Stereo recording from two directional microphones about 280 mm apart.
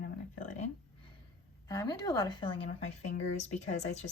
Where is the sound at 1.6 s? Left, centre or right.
Centre.